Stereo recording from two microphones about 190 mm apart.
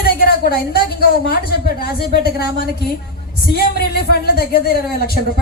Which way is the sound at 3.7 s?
55° left (ahead or behind).